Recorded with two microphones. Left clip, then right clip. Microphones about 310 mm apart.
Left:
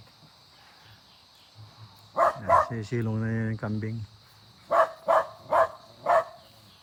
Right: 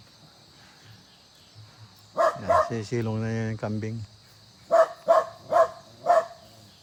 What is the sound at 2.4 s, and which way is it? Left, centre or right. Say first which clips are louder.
Speech: even; centre.